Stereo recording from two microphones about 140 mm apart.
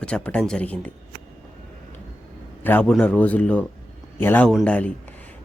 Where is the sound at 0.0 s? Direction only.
5° left (ahead or behind).